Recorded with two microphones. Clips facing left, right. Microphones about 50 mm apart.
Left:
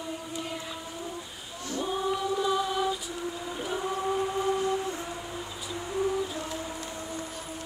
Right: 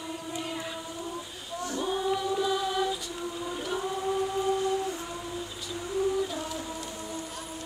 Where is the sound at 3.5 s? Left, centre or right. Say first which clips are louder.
Left 1 dB; centre.